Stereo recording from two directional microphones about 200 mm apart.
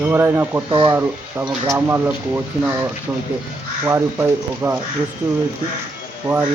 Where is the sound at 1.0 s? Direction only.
10° right (ahead or behind).